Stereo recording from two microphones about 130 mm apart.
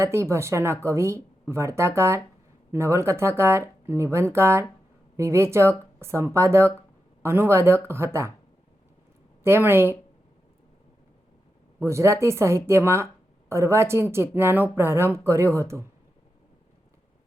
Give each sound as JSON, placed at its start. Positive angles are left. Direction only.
{"t": 0.0, "sound": "speech", "side_deg": -20}
{"t": 9.4, "sound": "a woman's voice", "side_deg": -20}
{"t": 11.8, "sound": "speech", "side_deg": -20}